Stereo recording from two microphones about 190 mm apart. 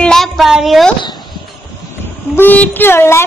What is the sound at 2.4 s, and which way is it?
Speech, 10° left (ahead or behind).